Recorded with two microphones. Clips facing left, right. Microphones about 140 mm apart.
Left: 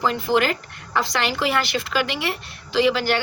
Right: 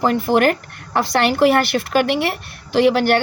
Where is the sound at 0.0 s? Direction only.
55° right (ahead or behind).